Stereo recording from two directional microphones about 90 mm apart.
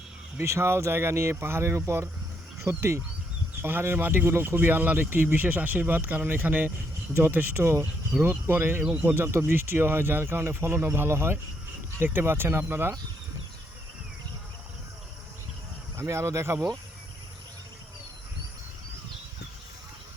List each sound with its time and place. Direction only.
0.3 s speech: 30° right (ahead or behind)
8.8 s a man's voice: 10° right (ahead or behind)
9.1 s speech: 30° right (ahead or behind)
16.0 s speech: 30° right (ahead or behind)